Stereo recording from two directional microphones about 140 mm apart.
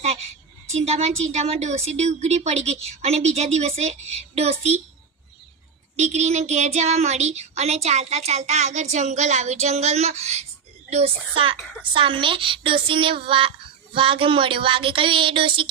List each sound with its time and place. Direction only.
0.7 s speech: 50° right (ahead or behind)
6.0 s speech: 55° right (ahead or behind)
11.9 s a sound: 35° right (ahead or behind)